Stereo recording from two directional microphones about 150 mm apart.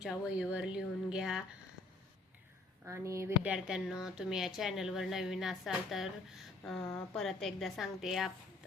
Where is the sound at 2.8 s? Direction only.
20° right (ahead or behind).